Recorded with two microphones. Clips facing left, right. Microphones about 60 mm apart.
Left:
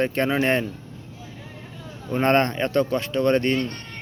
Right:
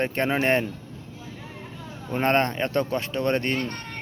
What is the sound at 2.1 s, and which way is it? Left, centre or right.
Speech, centre.